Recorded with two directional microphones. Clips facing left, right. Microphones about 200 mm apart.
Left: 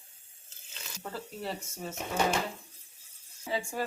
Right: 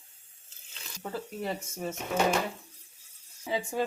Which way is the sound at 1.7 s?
15° right (ahead or behind).